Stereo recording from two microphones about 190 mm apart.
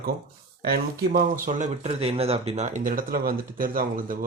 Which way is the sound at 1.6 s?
35° right (ahead or behind).